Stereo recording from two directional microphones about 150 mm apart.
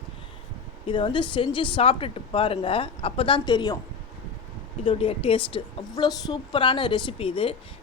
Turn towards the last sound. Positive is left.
turn(degrees=35)  # may be behind; listen again after turning